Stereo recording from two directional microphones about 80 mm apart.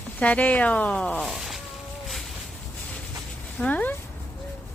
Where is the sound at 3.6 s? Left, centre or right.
Left.